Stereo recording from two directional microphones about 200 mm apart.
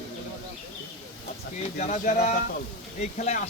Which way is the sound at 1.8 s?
40° left (ahead or behind).